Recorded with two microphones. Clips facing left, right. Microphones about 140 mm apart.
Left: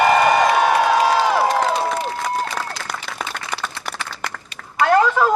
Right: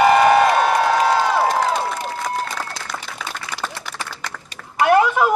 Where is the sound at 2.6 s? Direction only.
45° left (ahead or behind).